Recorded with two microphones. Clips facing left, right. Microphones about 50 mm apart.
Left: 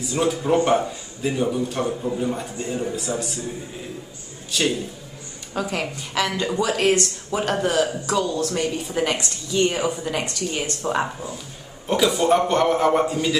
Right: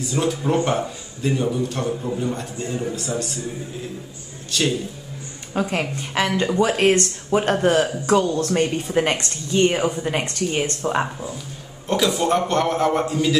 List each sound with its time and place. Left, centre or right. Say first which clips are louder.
0.0 s a man's voice: even; centre
4.5 s speech: even; centre
5.5 s a woman's voice: right 3 dB; right
10.8 s a man's voice: right 1 dB; centre